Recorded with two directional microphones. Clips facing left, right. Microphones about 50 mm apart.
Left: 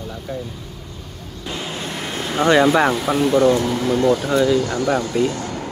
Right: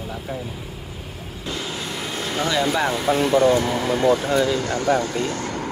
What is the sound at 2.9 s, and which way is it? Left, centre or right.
Speech, centre.